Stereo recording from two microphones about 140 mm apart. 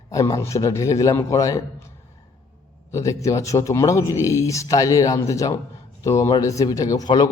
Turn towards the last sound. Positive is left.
turn(degrees=30)  # may be behind; listen again after turning